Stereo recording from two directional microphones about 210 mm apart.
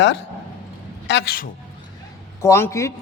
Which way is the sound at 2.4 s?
10° left (ahead or behind).